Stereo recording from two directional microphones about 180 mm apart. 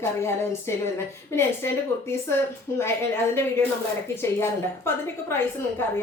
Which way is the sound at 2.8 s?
15° left (ahead or behind).